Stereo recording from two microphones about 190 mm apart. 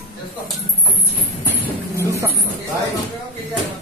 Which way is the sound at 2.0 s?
15° right (ahead or behind).